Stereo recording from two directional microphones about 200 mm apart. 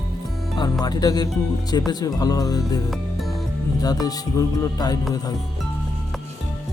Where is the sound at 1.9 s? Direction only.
20° left (ahead or behind).